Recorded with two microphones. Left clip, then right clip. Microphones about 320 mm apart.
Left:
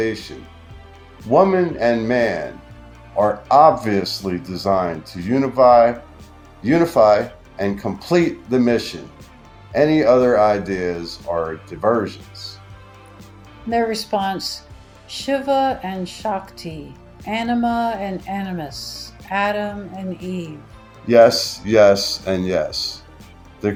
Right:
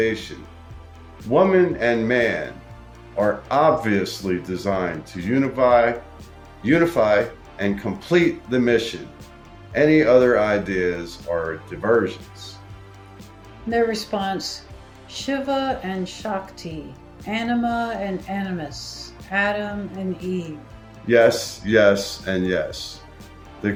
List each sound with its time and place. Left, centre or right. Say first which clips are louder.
1.3 s speech: left 2 dB; centre
3.6 s speech: left 4 dB; centre
13.7 s speech: left 1 dB; centre
20.2 s speech: right 3 dB; centre
21.1 s speech: left 4 dB; centre